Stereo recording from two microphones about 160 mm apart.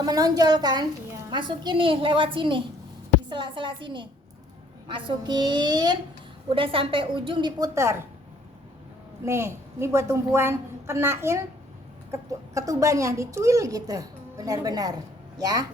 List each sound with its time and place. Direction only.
0.0 s a woman's voice: 25° right (ahead or behind)
7.8 s a woman's voice: 15° right (ahead or behind)
9.2 s a woman's voice: 15° right (ahead or behind)